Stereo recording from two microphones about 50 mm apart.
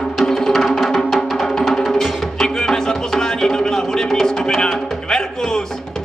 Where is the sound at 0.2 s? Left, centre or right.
Centre.